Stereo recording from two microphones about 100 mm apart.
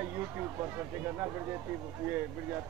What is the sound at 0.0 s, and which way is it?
Speech, 20° right (ahead or behind).